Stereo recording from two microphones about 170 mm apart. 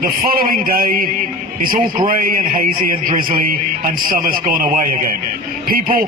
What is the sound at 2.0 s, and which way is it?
A man's voice, 55° right (ahead or behind).